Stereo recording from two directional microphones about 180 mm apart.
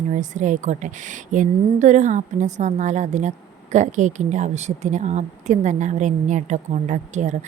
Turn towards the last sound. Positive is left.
turn(degrees=-40)  # may be behind; listen again after turning